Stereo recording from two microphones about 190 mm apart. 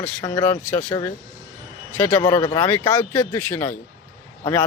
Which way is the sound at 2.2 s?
20° left (ahead or behind).